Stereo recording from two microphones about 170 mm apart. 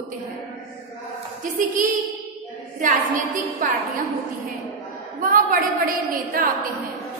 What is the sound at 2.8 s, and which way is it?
Speech, 50° right (ahead or behind).